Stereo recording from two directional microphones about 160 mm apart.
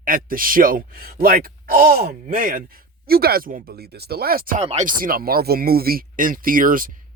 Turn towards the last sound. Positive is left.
turn(degrees=-60)  # may be behind; listen again after turning